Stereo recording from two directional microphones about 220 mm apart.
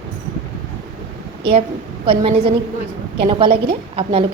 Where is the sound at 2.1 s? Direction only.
25° right (ahead or behind).